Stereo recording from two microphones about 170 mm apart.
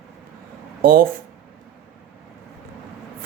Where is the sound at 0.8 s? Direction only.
55° right (ahead or behind).